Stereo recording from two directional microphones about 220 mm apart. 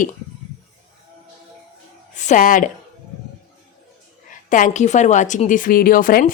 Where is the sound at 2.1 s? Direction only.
35° left (ahead or behind).